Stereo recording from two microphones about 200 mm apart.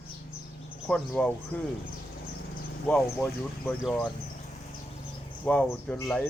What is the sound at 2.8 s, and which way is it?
Speech, 5° left (ahead or behind).